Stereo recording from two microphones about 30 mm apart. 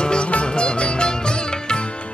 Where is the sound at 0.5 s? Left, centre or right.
Left.